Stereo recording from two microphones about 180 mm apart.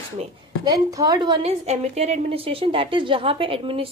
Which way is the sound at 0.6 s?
20° right (ahead or behind).